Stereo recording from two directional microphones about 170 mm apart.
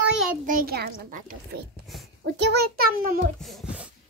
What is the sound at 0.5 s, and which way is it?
A woman's voice, 60° right (ahead or behind).